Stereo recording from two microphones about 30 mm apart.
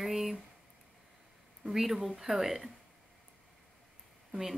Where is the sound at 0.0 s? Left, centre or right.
Centre.